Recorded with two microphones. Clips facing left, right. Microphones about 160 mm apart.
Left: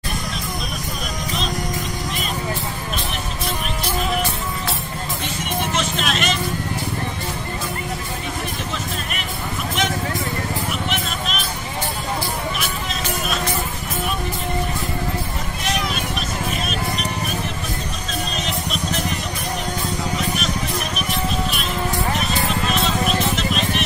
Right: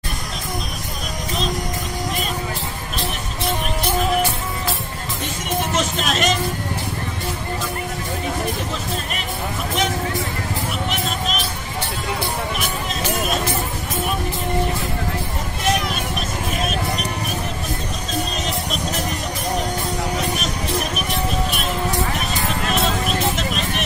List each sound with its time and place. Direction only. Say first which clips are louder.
5.8 s music: right 2 dB; 40° right (ahead or behind)